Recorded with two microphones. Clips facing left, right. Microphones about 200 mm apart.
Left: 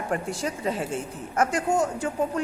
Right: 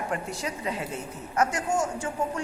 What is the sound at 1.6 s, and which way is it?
Speech, 60° left (ahead or behind).